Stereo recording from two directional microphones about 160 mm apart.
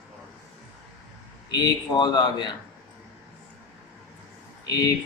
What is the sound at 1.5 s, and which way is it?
Speech, 25° left (ahead or behind).